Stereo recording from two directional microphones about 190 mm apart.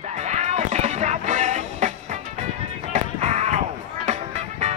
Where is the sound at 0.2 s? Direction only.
35° right (ahead or behind).